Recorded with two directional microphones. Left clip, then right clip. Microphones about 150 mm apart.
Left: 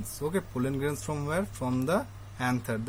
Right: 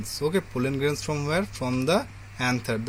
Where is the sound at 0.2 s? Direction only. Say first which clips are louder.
Right 5 dB; 30° right (ahead or behind).